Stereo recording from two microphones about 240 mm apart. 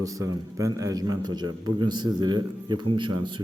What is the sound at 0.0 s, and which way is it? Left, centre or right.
A man's voice, centre.